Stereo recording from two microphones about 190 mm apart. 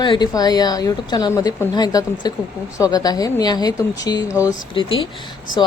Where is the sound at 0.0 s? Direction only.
25° left (ahead or behind).